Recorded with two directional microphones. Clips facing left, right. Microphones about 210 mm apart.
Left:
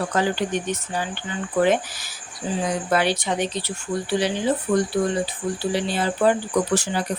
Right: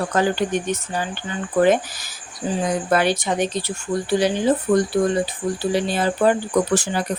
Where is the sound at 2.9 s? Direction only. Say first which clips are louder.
Right 2 dB; 45° right (ahead or behind).